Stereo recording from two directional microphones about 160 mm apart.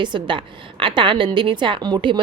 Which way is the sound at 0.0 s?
30° right (ahead or behind).